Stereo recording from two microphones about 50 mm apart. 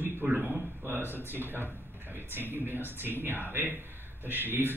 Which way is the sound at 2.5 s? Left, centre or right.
Right.